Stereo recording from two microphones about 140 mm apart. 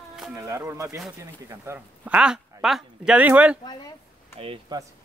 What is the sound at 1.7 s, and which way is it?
Speech, 10° right (ahead or behind).